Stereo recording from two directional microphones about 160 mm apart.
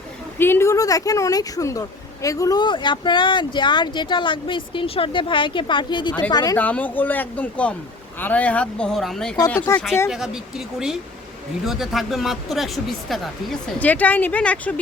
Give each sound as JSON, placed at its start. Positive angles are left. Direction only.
{"t": 0.3, "sound": "speech", "side_deg": 15}
{"t": 6.6, "sound": "speech", "side_deg": 10}
{"t": 10.1, "sound": "speech", "side_deg": -5}